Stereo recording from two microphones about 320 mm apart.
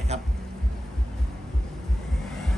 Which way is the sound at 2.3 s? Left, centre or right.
Centre.